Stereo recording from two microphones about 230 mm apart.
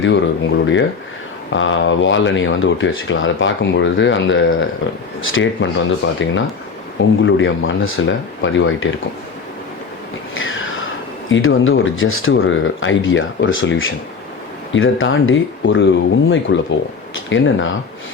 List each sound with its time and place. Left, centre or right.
0.0 s speech: left
10.3 s a sound: left
11.3 s speech: left